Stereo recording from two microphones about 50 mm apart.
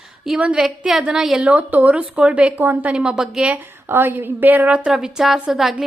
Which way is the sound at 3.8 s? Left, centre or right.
Right.